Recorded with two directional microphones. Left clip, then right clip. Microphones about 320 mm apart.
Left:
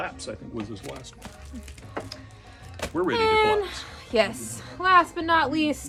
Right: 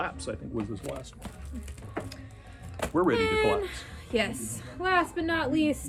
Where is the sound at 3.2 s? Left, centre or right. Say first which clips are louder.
Left 5 dB; centre.